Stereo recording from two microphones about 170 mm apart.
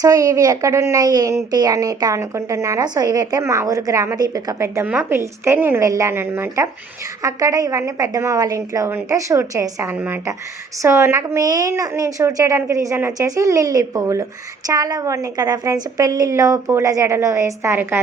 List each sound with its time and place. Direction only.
0.0 s a woman's voice: 20° right (ahead or behind)